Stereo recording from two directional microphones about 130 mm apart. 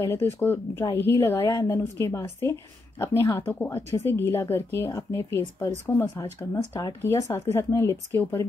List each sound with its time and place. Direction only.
0.0 s speech: 20° left (ahead or behind)